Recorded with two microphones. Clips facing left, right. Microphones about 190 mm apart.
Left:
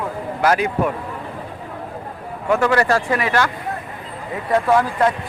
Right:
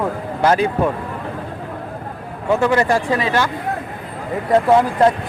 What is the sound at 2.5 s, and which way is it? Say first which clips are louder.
Speech: right 1 dB; 20° right (ahead or behind).